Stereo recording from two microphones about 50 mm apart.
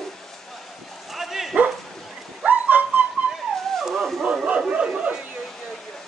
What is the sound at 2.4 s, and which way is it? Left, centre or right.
Dog, right.